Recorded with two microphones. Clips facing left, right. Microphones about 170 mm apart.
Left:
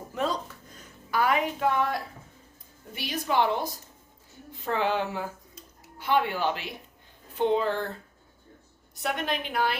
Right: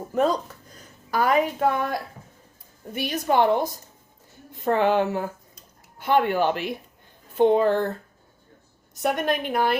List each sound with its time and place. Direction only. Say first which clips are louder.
0.1 s a woman's voice: right 7 dB; 45° right (ahead or behind)
2.9 s speech: right 5 dB; 50° right (ahead or behind)
9.0 s speech: right 6 dB; 50° right (ahead or behind)